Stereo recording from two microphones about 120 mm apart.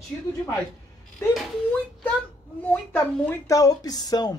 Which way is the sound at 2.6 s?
15° left (ahead or behind).